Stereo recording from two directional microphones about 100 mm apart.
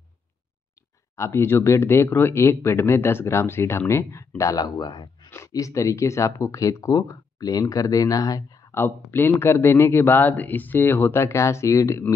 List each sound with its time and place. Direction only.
1.1 s speech: 30° left (ahead or behind); by 5.3 s 50° left (ahead or behind)
5.5 s speech: 35° left (ahead or behind)
8.7 s speech: 20° left (ahead or behind)